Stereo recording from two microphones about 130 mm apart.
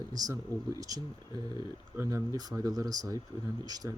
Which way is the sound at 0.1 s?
30° right (ahead or behind).